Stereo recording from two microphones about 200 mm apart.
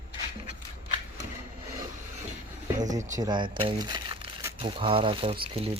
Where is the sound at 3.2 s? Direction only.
20° right (ahead or behind).